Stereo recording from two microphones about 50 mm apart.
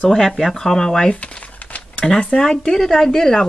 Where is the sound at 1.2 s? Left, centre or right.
Left.